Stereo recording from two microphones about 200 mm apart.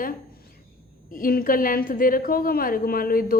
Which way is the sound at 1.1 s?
45° left (ahead or behind).